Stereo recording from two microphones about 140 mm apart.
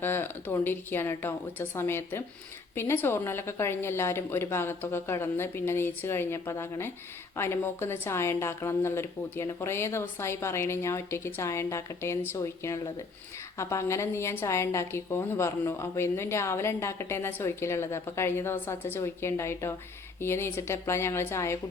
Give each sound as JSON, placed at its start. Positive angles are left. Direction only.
{"t": 0.0, "sound": "a woman's voice", "side_deg": 15}